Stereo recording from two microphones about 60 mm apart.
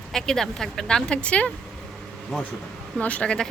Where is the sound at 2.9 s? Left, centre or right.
Left.